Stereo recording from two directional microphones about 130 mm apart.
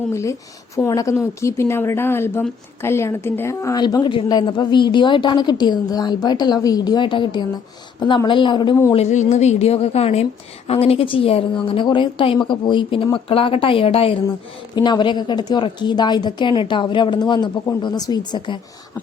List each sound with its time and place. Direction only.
0.1 s a woman's voice: 20° left (ahead or behind); by 8.7 s 40° left (ahead or behind)
9.0 s a woman's voice: 65° left (ahead or behind)
14.8 s a woman's voice: 35° left (ahead or behind)